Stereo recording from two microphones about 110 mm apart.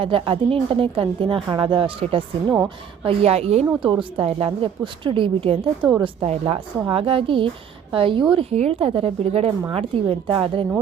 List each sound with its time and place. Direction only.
0.0 s a woman's voice: 55° right (ahead or behind)
6.2 s a woman's voice: 70° right (ahead or behind)
6.9 s a woman's voice: 55° right (ahead or behind)